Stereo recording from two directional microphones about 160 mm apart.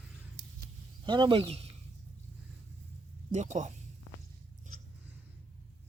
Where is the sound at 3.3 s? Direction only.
45° right (ahead or behind).